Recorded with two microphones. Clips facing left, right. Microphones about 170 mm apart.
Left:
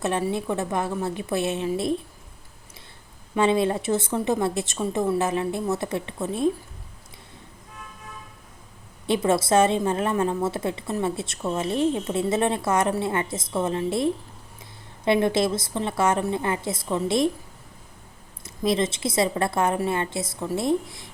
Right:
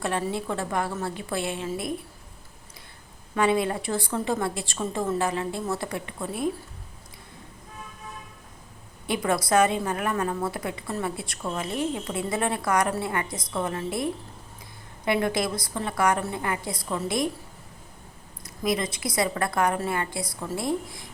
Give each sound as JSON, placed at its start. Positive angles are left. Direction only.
{"t": 0.0, "sound": "a woman's voice", "side_deg": 20}
{"t": 3.3, "sound": "a woman's voice", "side_deg": 25}
{"t": 9.0, "sound": "a woman's voice", "side_deg": 25}
{"t": 18.4, "sound": "a woman's voice", "side_deg": 25}